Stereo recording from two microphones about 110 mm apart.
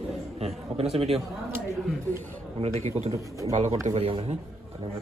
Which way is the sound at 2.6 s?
80° right.